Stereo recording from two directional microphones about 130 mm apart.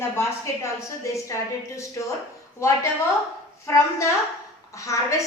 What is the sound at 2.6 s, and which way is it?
Speech, 20° left (ahead or behind).